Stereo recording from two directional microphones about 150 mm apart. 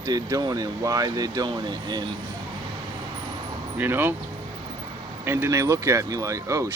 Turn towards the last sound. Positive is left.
turn(degrees=-20)  # may be behind; listen again after turning